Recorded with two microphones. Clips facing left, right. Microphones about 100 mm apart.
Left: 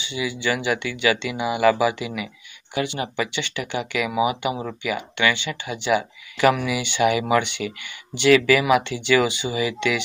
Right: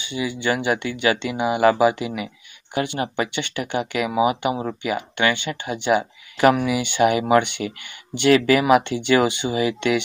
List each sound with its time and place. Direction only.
0.0 s speech: 45° right (ahead or behind)
7.6 s speech: 30° right (ahead or behind)
8.1 s speech: 50° right (ahead or behind)
8.4 s speech: 40° right (ahead or behind)